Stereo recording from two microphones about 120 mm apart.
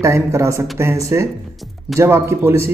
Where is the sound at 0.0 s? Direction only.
25° right (ahead or behind).